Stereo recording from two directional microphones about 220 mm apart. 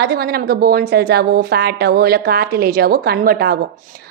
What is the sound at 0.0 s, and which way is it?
A woman's voice, 45° right (ahead or behind).